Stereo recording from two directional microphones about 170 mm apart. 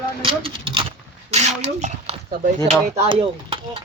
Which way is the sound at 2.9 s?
35° right (ahead or behind).